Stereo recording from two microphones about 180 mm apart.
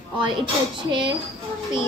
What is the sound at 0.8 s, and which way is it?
Speech, 25° right (ahead or behind).